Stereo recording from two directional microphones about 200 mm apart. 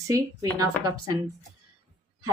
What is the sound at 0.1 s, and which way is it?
Speech, 15° right (ahead or behind).